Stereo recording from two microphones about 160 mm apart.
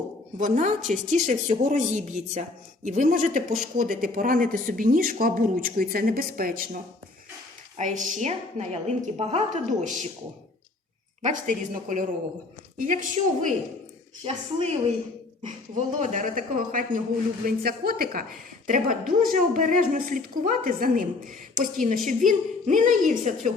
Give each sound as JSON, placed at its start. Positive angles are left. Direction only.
{"t": 0.3, "sound": "a woman's voice", "side_deg": -55}
{"t": 7.8, "sound": "a woman's voice", "side_deg": -50}
{"t": 11.2, "sound": "a woman's voice", "side_deg": -50}
{"t": 14.3, "sound": "a woman's voice", "side_deg": -40}
{"t": 15.7, "sound": "a woman's voice", "side_deg": -50}